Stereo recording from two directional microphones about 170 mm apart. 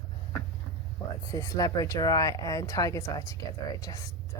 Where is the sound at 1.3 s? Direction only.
20° left (ahead or behind).